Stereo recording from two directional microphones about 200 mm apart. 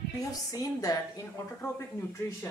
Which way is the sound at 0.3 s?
20° left (ahead or behind).